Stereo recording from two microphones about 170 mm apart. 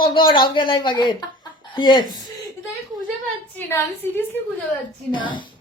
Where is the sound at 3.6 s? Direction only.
10° left (ahead or behind).